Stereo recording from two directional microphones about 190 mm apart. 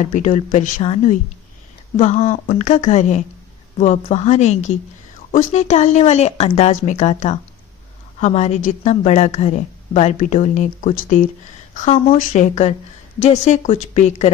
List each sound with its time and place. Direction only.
0.0 s a woman's voice: 40° left (ahead or behind)